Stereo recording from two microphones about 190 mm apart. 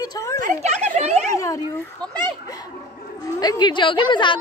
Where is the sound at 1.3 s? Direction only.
15° left (ahead or behind).